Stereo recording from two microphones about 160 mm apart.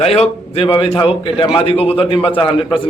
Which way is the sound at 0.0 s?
40° left (ahead or behind).